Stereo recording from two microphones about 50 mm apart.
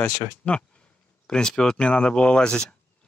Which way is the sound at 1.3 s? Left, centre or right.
Centre.